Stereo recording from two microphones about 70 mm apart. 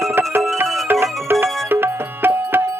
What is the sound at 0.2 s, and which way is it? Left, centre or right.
Music, right.